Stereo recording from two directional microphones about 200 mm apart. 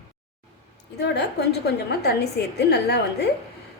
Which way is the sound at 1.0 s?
55° left (ahead or behind).